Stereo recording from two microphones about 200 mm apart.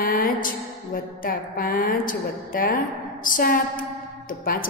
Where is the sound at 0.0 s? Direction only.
45° left (ahead or behind).